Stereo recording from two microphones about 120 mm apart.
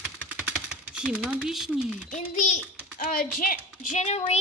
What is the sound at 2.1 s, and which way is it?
Speech, 90° left.